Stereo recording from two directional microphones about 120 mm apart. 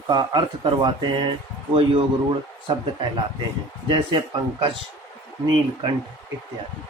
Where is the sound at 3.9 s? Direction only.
40° right (ahead or behind).